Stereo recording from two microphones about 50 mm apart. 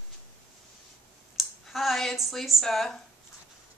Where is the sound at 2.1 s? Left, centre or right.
Centre.